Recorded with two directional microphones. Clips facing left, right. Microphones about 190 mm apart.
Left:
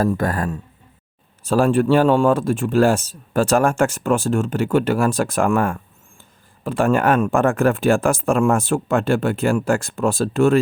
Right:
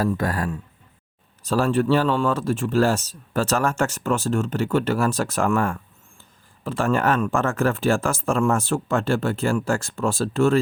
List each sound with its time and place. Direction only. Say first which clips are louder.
0.0 s speech: left 3 dB; 50° left (ahead or behind)